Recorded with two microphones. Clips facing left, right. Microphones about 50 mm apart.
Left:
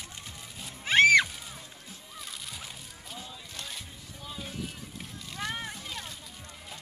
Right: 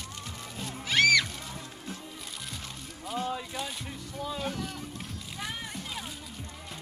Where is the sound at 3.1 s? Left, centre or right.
Right.